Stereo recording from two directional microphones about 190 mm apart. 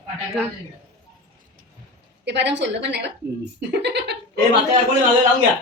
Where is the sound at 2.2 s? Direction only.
65° right (ahead or behind).